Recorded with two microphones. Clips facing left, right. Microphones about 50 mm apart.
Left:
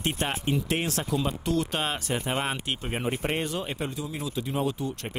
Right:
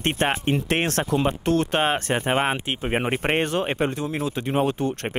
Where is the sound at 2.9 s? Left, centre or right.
Right.